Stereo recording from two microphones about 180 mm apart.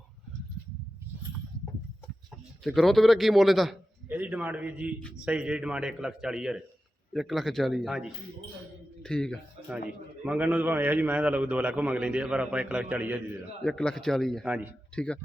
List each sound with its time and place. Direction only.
2.6 s a man's voice: centre (ahead or behind)
10.2 s a man's voice: 10° right (ahead or behind)
13.6 s a man's voice: 5° left (ahead or behind)
14.9 s speech: 5° left (ahead or behind)